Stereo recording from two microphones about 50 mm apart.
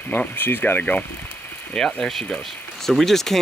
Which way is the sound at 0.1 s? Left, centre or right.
Left.